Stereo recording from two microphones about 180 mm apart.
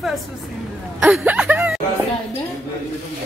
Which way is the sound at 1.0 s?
5° right (ahead or behind).